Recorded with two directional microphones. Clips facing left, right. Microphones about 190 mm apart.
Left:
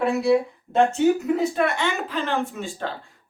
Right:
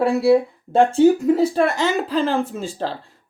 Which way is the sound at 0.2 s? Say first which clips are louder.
Right 4 dB; 30° right (ahead or behind).